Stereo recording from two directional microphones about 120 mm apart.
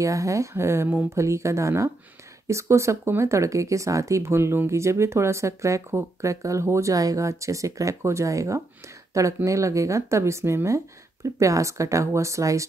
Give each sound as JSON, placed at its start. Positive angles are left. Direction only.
{"t": 0.0, "sound": "speech", "side_deg": -25}